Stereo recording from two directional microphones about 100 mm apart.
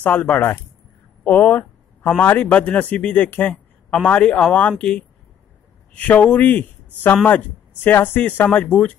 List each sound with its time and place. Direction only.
0.0 s speech: 15° left (ahead or behind)